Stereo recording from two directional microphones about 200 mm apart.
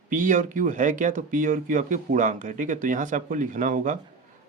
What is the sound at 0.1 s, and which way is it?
Speech, 40° right (ahead or behind).